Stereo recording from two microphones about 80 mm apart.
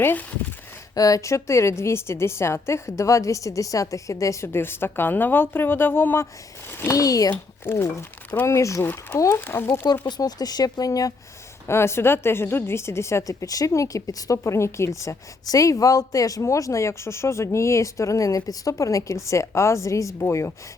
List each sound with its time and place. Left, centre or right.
0.0 s speech: left
0.9 s a woman's voice: left
6.9 s speech: left
7.6 s a woman's voice: left
8.8 s a woman's voice: left
10.1 s speech: left
11.7 s a woman's voice: left